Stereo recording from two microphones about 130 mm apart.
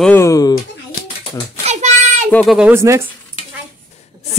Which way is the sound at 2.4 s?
5° right (ahead or behind).